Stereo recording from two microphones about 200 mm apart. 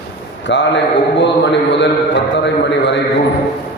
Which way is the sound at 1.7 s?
60° left (ahead or behind).